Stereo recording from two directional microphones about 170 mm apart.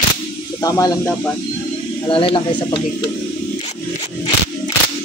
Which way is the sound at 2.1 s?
30° left (ahead or behind).